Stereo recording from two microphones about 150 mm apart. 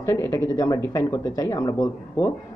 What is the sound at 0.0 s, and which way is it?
Speech, 20° left (ahead or behind).